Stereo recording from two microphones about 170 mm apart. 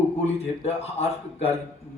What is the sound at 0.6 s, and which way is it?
Speech, 40° left (ahead or behind).